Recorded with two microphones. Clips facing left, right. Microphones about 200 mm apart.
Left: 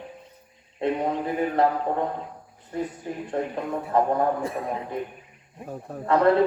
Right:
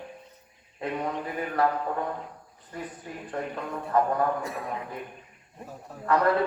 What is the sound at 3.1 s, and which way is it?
Speech, 25° left (ahead or behind).